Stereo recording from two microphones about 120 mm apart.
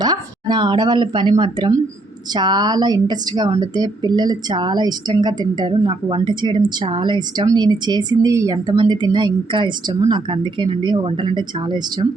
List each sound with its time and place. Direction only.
0.0 s a woman's voice: 35° right (ahead or behind)
8.7 s a woman's voice: 40° right (ahead or behind)